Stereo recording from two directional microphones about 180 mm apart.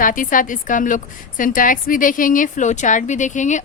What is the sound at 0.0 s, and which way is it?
A woman's voice, 50° left (ahead or behind).